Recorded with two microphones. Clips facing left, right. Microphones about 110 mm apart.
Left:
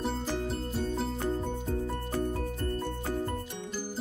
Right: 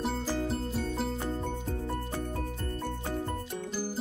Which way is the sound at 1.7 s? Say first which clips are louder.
Left 2 dB; 25° right (ahead or behind).